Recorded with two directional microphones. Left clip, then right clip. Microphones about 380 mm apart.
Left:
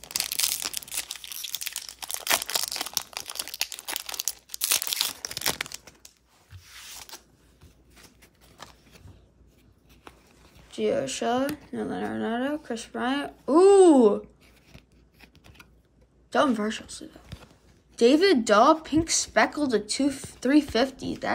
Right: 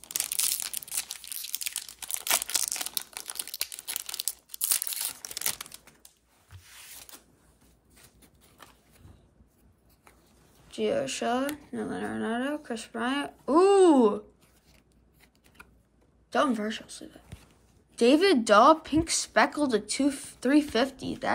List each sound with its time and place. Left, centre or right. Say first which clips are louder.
0.0 s crumpling: left 4 dB; centre
5.7 s crumpling: left 8 dB; left
8.6 s a sound: left 6 dB; left
10.7 s speech: left 2 dB; centre
16.3 s speech: left 3 dB; centre